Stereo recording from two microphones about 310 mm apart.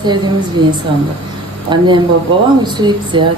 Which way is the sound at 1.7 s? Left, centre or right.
Centre.